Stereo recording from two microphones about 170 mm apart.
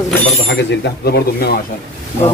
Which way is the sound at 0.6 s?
80° left.